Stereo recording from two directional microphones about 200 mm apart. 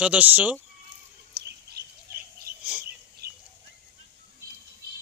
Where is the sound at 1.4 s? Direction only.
55° right (ahead or behind).